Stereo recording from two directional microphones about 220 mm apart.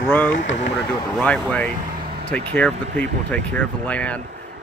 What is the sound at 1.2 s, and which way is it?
Speech, 5° left (ahead or behind).